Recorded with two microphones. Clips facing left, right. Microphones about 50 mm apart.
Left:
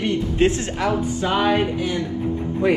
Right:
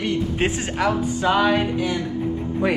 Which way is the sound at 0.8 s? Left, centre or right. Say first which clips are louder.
Right 3 dB; right.